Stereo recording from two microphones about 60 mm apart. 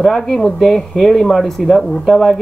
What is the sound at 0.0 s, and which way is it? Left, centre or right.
Speech, centre.